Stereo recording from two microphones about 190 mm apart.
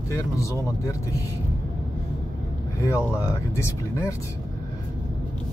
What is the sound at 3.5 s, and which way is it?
Speech, 15° left (ahead or behind).